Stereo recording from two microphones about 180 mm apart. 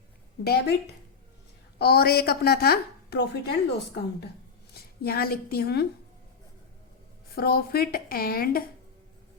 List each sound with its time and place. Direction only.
0.4 s a woman's voice: 60° left (ahead or behind)
1.8 s a woman's voice: 60° left (ahead or behind)
7.3 s a woman's voice: 55° left (ahead or behind)